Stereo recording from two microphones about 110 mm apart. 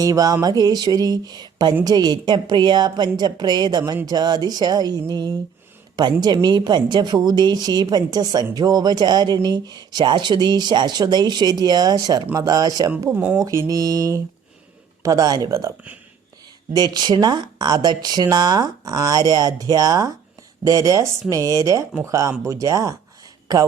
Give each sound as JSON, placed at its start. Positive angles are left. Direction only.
{"t": 0.0, "sound": "speech", "side_deg": -30}
{"t": 13.1, "sound": "speech", "side_deg": -15}
{"t": 13.4, "sound": "speech", "side_deg": -30}
{"t": 16.7, "sound": "speech", "side_deg": -40}